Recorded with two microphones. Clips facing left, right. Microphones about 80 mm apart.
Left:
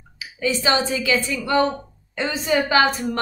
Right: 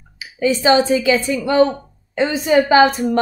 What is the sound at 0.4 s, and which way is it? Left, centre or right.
Speech, centre.